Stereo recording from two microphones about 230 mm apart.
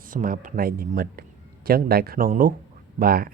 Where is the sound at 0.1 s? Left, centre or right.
Right.